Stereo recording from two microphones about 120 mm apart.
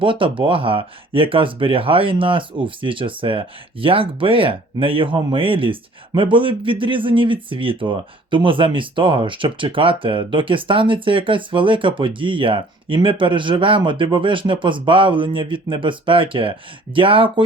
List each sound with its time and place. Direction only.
0.0 s speech: 45° right (ahead or behind)